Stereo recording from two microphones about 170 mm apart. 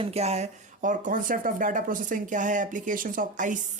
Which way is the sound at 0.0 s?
40° right (ahead or behind).